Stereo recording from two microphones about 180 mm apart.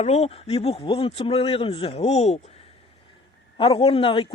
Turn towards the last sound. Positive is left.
turn(degrees=30)  # may be behind; listen again after turning